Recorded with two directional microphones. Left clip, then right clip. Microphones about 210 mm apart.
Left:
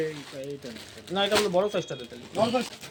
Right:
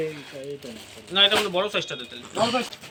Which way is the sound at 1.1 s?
45° left (ahead or behind).